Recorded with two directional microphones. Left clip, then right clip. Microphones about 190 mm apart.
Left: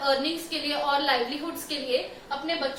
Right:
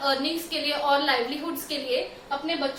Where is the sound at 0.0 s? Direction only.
20° right (ahead or behind).